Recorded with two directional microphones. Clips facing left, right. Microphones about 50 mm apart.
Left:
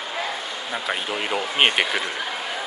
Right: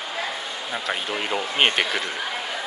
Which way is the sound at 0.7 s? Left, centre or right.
Centre.